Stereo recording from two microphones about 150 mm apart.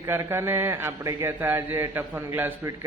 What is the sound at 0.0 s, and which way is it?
A man's voice, 20° right (ahead or behind).